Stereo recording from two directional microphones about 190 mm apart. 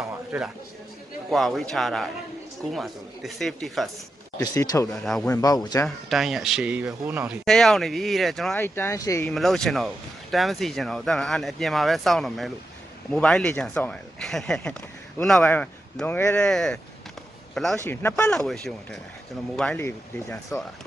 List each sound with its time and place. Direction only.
0.3 s speech: 5° right (ahead or behind)
4.4 s speech: 20° left (ahead or behind)
4.8 s speech: centre (ahead or behind)
5.3 s speech: 20° left (ahead or behind)
5.9 s speech: centre (ahead or behind)
8.5 s speech: 10° left (ahead or behind)
9.2 s speech: centre (ahead or behind)
17.8 s speech: 10° left (ahead or behind)
20.5 s speech: 15° left (ahead or behind)